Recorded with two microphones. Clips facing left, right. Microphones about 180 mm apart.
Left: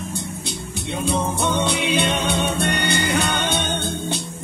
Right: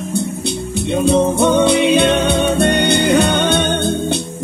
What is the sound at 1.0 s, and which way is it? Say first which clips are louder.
Music: right 9 dB; 65° right (ahead or behind).